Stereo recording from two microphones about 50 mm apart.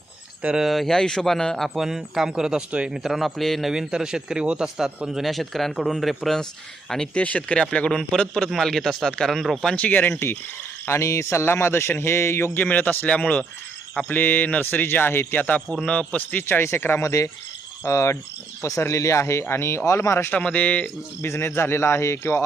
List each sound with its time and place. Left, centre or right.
0.7 s speech: centre
1.7 s speech: centre
3.7 s speech: centre
5.0 s speech: centre
7.1 s speech: left; by 9.7 s centre
9.7 s speech: left
10.8 s speech: left
12.5 s speech: left
14.1 s speech: left
16.5 s speech: left
17.0 s speech: left
20.3 s speech: left
21.2 s speech: left